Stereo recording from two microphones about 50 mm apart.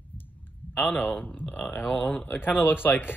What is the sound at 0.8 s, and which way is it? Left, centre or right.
A man's voice, left.